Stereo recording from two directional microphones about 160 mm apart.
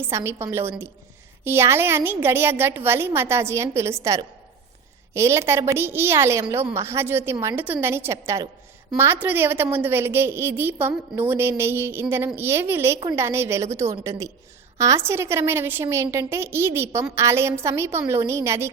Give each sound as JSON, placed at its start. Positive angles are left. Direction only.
{"t": 0.0, "sound": "a woman's voice", "side_deg": -15}